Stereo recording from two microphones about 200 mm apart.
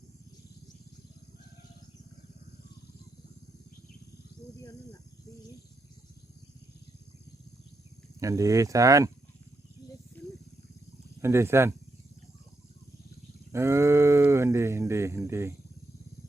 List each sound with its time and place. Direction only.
8.2 s speech: 15° right (ahead or behind)
10.2 s wild animals: 10° left (ahead or behind)
11.2 s speech: 10° right (ahead or behind)
13.5 s a sound: 15° right (ahead or behind)